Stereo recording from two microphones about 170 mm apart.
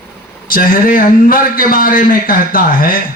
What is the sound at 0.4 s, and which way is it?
Speech, 55° left (ahead or behind).